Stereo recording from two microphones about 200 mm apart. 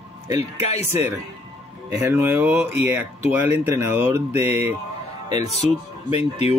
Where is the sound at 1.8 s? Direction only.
10° right (ahead or behind).